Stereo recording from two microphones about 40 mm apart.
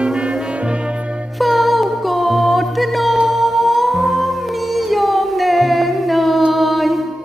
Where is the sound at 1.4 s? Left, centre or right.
Centre.